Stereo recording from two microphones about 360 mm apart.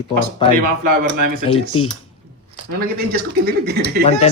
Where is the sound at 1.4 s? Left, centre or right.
Centre.